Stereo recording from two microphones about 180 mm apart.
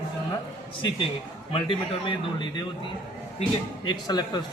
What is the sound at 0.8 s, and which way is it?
A man's voice, 30° left (ahead or behind).